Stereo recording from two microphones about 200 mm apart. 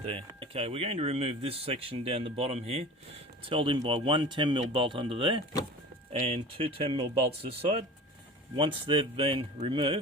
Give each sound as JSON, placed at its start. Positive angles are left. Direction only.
{"t": 0.0, "sound": "speech", "side_deg": -30}